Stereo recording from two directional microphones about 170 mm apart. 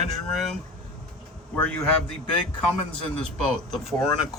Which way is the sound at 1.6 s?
5° left (ahead or behind).